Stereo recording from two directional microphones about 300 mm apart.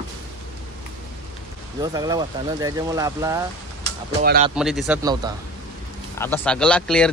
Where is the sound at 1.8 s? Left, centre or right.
Centre.